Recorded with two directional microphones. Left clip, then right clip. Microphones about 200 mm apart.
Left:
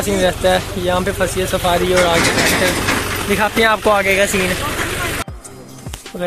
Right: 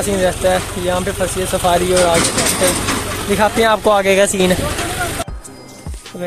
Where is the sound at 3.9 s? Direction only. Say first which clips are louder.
Right 1 dB; 20° right (ahead or behind).